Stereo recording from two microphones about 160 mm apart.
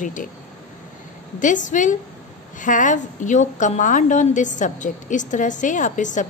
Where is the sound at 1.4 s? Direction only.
55° left (ahead or behind).